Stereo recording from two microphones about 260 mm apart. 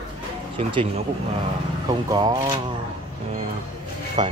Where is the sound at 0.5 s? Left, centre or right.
Right.